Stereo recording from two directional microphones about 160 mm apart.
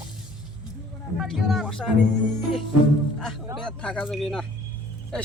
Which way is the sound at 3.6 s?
5° left (ahead or behind).